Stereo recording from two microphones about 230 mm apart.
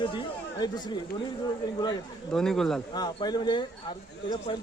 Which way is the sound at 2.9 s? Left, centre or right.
Centre.